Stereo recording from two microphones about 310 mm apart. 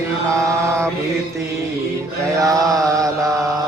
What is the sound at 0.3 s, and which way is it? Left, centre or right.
Mantra, centre.